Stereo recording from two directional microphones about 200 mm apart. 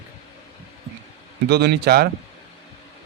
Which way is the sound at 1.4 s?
55° right (ahead or behind).